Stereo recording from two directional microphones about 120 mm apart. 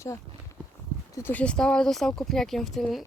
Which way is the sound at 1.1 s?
15° left (ahead or behind).